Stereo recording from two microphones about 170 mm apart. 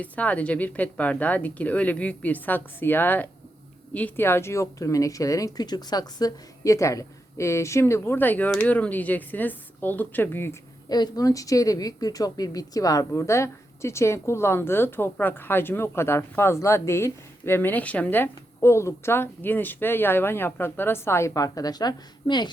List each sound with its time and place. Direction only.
0.0 s speech: 10° left (ahead or behind); by 22.5 s 25° left (ahead or behind)